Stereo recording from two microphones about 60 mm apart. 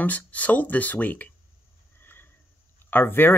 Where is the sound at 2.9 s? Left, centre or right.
Left.